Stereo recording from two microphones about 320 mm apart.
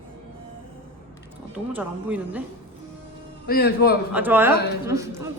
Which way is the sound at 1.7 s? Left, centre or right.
Centre.